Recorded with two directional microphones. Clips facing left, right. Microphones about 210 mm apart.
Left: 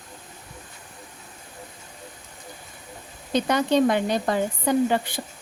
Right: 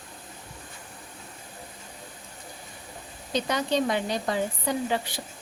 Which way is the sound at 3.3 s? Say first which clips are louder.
Left 5 dB; 55° left (ahead or behind).